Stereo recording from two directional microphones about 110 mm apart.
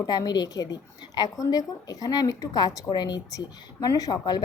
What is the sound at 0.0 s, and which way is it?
A woman's voice, 40° left (ahead or behind).